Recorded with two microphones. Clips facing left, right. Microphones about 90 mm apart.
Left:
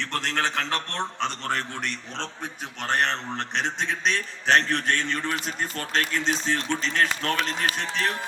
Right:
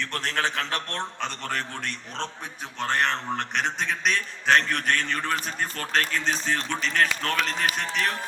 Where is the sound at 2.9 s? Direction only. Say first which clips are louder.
Even; 25° left (ahead or behind).